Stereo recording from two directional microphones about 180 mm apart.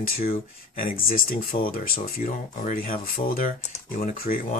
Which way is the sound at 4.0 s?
50° left (ahead or behind).